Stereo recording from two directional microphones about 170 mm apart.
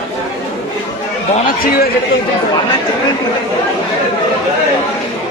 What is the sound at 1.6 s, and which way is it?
Speech, 60° left (ahead or behind).